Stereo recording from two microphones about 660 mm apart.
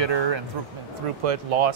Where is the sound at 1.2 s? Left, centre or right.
Right.